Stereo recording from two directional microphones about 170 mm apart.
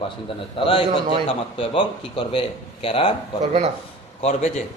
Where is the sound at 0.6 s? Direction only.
30° left (ahead or behind).